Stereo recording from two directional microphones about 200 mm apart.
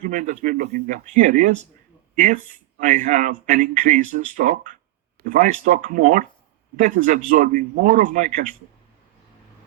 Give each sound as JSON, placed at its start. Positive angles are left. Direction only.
{"t": 0.0, "sound": "speech", "side_deg": -40}